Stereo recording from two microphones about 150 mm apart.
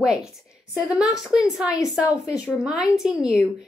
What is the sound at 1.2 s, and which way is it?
A woman's voice, 5° right (ahead or behind).